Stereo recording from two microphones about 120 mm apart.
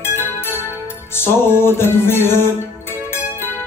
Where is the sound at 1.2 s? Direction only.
20° left (ahead or behind).